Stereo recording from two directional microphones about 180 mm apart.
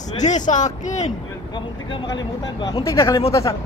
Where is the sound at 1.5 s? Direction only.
25° left (ahead or behind).